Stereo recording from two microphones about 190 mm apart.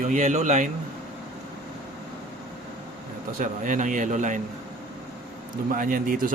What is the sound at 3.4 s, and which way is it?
Speech, 45° right (ahead or behind).